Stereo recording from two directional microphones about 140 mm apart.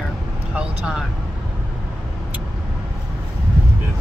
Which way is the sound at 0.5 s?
5° right (ahead or behind).